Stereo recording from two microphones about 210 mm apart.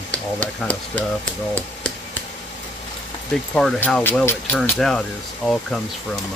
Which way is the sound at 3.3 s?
Centre (ahead or behind).